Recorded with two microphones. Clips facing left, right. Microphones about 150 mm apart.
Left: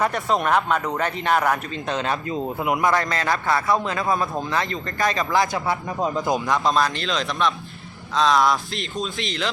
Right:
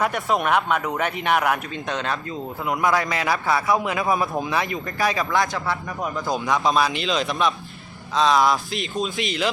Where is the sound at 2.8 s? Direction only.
5° right (ahead or behind).